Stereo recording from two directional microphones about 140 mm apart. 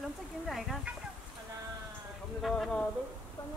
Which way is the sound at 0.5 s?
Centre (ahead or behind).